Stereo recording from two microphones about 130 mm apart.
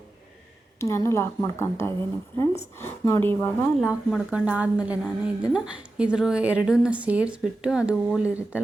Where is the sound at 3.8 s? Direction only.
5° right (ahead or behind).